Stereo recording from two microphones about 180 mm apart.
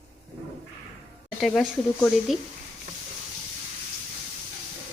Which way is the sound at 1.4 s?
Centre (ahead or behind).